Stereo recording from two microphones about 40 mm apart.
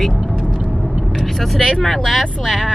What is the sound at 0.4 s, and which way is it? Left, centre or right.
Vehicle, centre.